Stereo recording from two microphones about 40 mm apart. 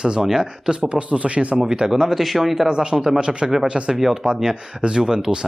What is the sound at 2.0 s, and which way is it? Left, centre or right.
Speech, centre.